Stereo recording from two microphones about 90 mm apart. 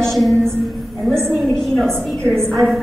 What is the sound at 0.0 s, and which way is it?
Music, centre (ahead or behind).